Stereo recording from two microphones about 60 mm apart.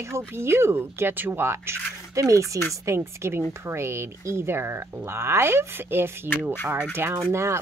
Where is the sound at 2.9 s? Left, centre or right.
Right.